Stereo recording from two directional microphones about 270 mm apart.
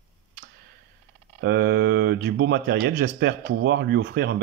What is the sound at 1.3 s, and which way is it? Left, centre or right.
Speech, right.